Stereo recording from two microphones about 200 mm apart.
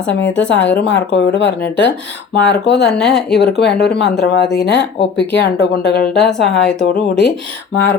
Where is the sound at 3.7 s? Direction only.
55° left (ahead or behind).